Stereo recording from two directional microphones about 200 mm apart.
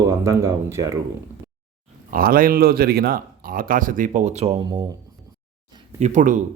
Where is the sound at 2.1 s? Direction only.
45° right (ahead or behind).